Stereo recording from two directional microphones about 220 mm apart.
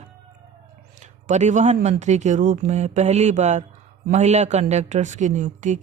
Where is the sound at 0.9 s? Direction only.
30° right (ahead or behind).